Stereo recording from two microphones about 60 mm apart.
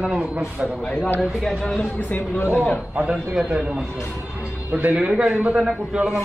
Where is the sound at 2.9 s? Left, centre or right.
Right.